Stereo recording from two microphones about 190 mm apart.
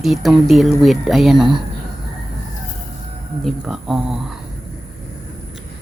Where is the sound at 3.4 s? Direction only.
Centre (ahead or behind).